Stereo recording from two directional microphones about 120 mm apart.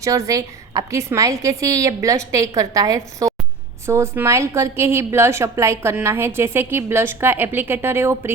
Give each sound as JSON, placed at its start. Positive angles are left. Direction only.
{"t": 0.0, "sound": "a woman's voice", "side_deg": -30}